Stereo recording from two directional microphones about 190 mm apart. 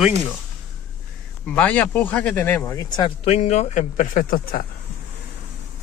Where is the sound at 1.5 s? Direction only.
5° left (ahead or behind).